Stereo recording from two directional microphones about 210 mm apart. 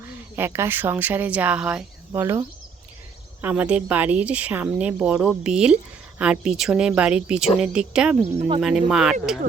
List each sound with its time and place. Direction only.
0.0 s speech: 10° right (ahead or behind)
3.4 s speech: 5° right (ahead or behind)
8.4 s speech: 25° right (ahead or behind)
8.6 s speech: centre (ahead or behind)